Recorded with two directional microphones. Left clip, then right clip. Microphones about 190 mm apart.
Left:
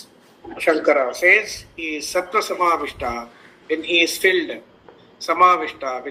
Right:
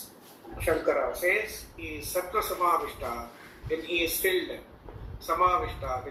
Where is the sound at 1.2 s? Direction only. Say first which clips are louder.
Left 12 dB; 45° left (ahead or behind).